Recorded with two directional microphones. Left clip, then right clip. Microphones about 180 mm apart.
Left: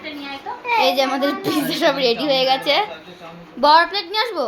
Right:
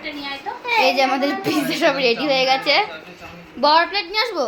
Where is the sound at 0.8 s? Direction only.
Centre (ahead or behind).